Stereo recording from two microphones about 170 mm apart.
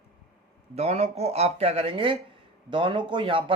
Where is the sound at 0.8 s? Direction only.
40° right (ahead or behind).